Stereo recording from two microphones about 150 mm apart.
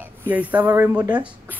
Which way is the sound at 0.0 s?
10° right (ahead or behind).